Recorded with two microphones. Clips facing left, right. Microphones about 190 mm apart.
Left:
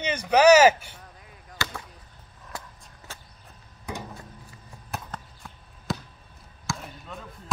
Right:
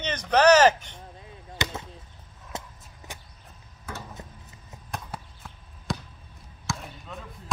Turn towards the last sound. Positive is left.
turn(degrees=0)  # may be behind; listen again after turning